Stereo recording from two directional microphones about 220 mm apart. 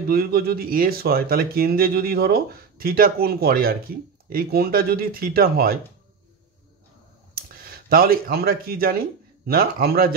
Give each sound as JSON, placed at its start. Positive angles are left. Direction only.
{"t": 0.1, "sound": "speech", "side_deg": -45}
{"t": 7.3, "sound": "speech", "side_deg": -40}